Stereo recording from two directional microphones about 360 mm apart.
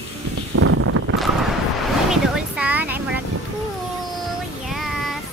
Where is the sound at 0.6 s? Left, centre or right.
Right.